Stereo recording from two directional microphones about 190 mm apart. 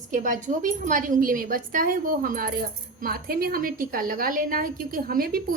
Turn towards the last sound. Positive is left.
turn(degrees=-50)  # may be behind; listen again after turning